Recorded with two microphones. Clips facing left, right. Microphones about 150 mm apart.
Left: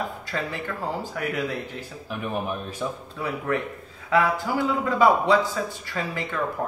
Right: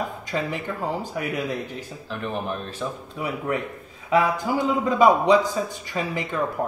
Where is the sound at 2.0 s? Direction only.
10° left (ahead or behind).